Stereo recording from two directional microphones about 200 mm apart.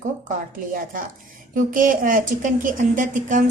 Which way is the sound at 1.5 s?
40° right (ahead or behind).